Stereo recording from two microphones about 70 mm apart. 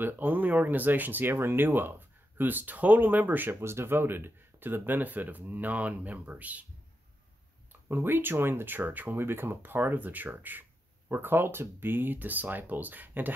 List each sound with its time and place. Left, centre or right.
0.0 s speech: right
7.9 s speech: right